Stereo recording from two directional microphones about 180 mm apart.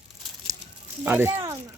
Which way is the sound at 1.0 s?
10° right (ahead or behind).